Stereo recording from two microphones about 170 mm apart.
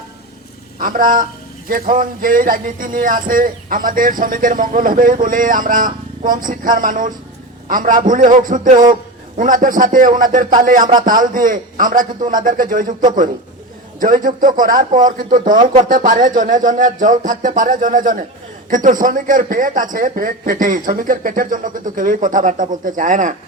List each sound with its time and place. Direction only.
0.8 s speech: 55° right (ahead or behind)